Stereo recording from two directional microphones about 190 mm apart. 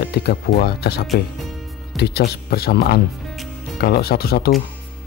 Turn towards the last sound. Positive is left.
turn(degrees=55)  # may be behind; listen again after turning